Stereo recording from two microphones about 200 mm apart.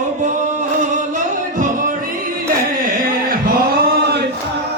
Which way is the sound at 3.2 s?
50° right (ahead or behind).